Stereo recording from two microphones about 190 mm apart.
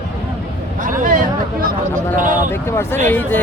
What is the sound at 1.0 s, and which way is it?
Speech, 45° right (ahead or behind).